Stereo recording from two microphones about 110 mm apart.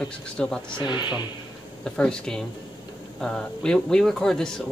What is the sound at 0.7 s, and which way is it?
Speech, 45° left (ahead or behind).